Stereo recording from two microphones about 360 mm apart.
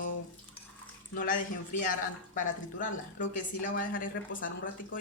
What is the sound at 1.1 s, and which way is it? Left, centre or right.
Speech, left.